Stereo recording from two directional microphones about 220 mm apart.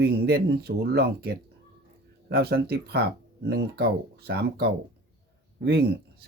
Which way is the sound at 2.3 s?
45° right (ahead or behind).